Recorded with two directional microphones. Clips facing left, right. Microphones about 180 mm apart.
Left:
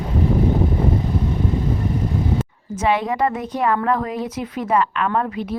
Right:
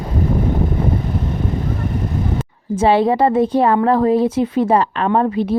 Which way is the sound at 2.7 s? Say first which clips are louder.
Right 6 dB; 30° right (ahead or behind).